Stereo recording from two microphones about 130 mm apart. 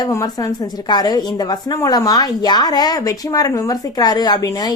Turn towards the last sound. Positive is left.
turn(degrees=30)  # may be behind; listen again after turning